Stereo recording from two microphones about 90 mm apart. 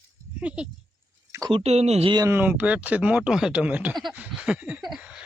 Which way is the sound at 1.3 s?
30° right (ahead or behind).